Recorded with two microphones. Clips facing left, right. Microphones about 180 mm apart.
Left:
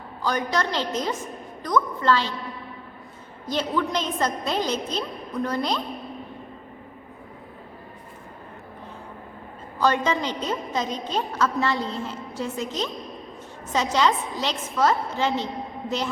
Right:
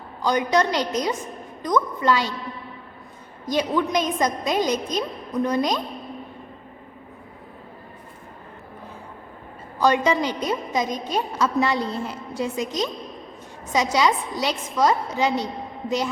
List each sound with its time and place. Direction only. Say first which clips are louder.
0.2 s a woman's voice: right 5 dB; 20° right (ahead or behind)
3.4 s a woman's voice: right 3 dB; 15° right (ahead or behind)
9.8 s a woman's voice: right 3 dB; 15° right (ahead or behind)